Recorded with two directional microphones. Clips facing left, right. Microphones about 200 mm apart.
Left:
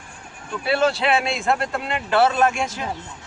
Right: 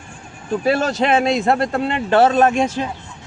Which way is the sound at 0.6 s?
40° right (ahead or behind).